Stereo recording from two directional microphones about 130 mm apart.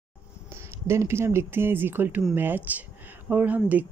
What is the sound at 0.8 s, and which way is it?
Speech, 20° right (ahead or behind).